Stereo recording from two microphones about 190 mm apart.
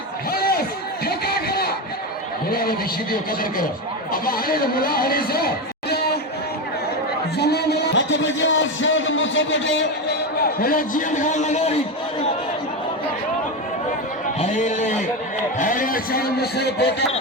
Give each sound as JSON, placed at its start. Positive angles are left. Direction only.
{"t": 0.3, "sound": "a sound", "side_deg": 50}
{"t": 2.5, "sound": "a man's voice", "side_deg": 50}
{"t": 7.3, "sound": "a man's voice", "side_deg": 60}
{"t": 14.3, "sound": "a man's voice", "side_deg": 40}